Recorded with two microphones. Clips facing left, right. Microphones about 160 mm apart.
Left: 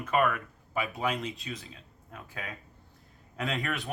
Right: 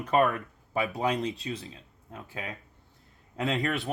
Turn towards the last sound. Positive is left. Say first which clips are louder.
# right 4 dB
turn(degrees=-35)  # may be behind; listen again after turning